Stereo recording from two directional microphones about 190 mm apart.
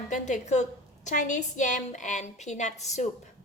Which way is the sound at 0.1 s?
40° left (ahead or behind).